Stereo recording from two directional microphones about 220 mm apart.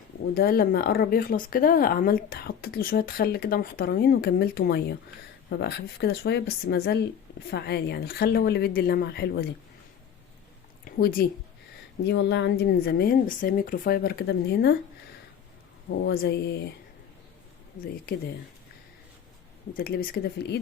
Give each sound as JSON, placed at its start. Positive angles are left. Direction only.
{"t": 0.3, "sound": "speech", "side_deg": 45}
{"t": 10.9, "sound": "speech", "side_deg": 40}
{"t": 12.0, "sound": "speech", "side_deg": 50}
{"t": 15.9, "sound": "speech", "side_deg": 45}
{"t": 19.7, "sound": "speech", "side_deg": 40}